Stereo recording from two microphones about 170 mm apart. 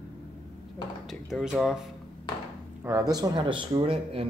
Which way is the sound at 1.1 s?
Centre (ahead or behind).